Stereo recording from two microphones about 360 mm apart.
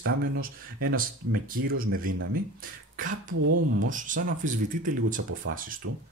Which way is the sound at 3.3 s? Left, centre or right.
Right.